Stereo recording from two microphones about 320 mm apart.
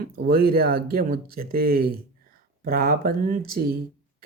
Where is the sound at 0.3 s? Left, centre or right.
Right.